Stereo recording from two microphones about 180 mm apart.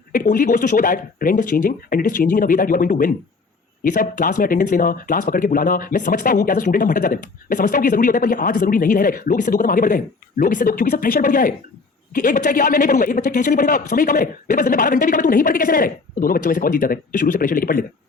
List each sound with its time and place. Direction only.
0.1 s speech: 50° left (ahead or behind)